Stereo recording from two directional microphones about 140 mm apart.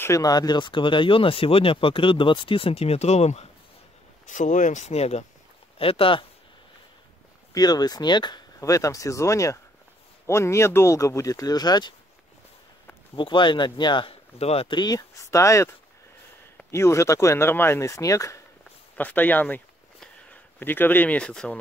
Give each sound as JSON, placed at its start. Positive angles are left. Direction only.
{"t": 0.0, "sound": "speech", "side_deg": 25}
{"t": 4.3, "sound": "speech", "side_deg": 65}
{"t": 7.5, "sound": "speech", "side_deg": 30}
{"t": 13.1, "sound": "speech", "side_deg": 35}
{"t": 14.4, "sound": "speech", "side_deg": 45}
{"t": 14.8, "sound": "speech", "side_deg": 25}
{"t": 16.7, "sound": "speech", "side_deg": 20}